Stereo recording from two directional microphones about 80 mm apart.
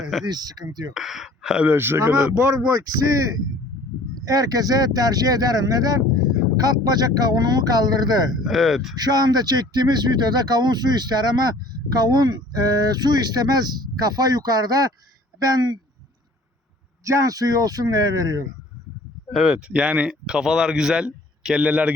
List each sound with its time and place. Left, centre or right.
0.0 s speech: centre
0.3 s speech: right
0.9 s speech: centre
1.6 s speech: right
8.4 s speech: centre
9.0 s speech: right
17.0 s speech: right
19.3 s speech: centre